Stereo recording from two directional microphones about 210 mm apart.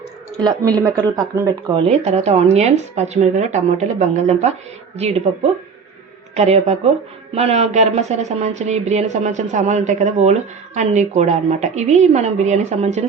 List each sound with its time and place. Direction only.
0.3 s speech: 20° right (ahead or behind)